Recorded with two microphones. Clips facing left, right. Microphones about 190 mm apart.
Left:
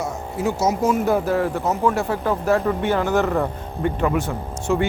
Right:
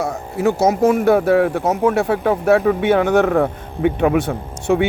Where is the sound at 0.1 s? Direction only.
60° right (ahead or behind).